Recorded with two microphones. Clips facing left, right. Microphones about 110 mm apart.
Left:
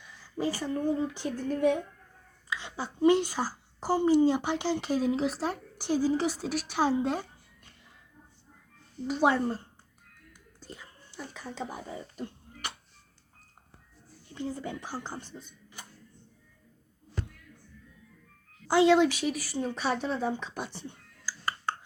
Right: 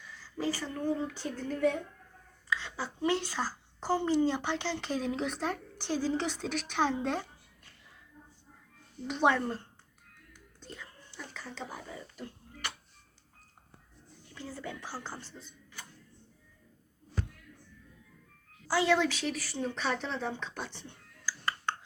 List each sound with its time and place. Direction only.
0.2 s speech: 15° left (ahead or behind)
9.0 s speech: 5° left (ahead or behind)
10.6 s whispering: 10° left (ahead or behind)
11.9 s a sound: 20° left (ahead or behind)
14.3 s speech: 20° left (ahead or behind)
18.7 s speech: 20° left (ahead or behind)
21.2 s music: 10° left (ahead or behind)